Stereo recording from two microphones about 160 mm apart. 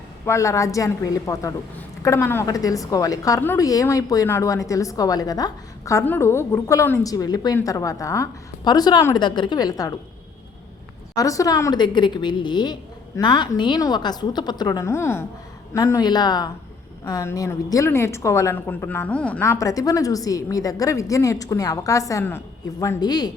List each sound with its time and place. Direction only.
0.3 s a woman's voice: 20° left (ahead or behind)
11.1 s a woman's voice: 20° left (ahead or behind)